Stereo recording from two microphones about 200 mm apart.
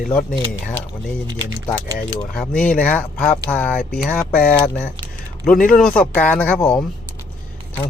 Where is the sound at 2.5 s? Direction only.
5° left (ahead or behind).